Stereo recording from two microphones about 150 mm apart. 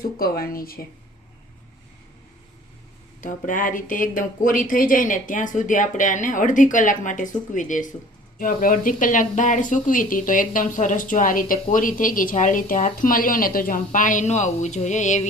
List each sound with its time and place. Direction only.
0.0 s speech: 80° left
3.2 s speech: 60° left (ahead or behind)
8.4 s speech: 70° left (ahead or behind); by 15.3 s 55° left (ahead or behind)